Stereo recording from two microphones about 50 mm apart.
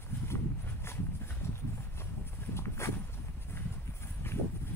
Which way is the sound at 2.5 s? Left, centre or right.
Left.